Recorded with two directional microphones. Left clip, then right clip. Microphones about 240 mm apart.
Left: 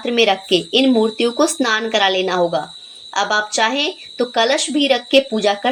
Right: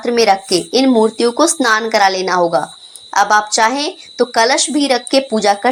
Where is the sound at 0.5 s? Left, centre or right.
Right.